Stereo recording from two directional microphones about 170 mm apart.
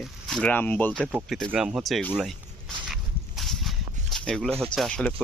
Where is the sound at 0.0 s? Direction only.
Centre (ahead or behind).